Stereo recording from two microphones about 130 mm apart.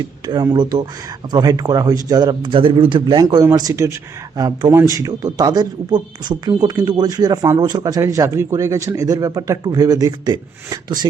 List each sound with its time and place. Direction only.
0.0 s a man's voice: 35° right (ahead or behind)